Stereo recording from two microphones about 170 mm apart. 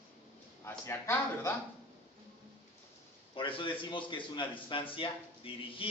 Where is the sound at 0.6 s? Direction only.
15° left (ahead or behind).